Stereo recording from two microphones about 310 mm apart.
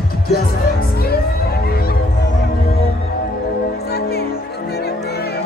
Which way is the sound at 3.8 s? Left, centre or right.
Left.